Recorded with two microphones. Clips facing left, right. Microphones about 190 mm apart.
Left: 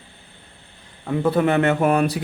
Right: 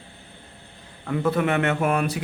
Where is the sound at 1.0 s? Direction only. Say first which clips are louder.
Left 4 dB; 25° left (ahead or behind).